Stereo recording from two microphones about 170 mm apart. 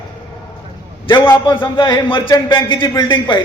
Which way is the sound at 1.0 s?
30° left (ahead or behind).